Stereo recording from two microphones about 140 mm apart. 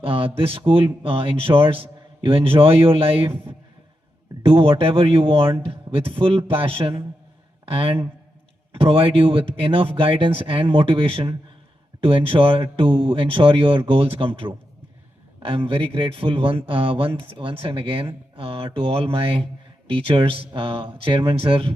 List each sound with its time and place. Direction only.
0.0 s a man's voice: 40° right (ahead or behind)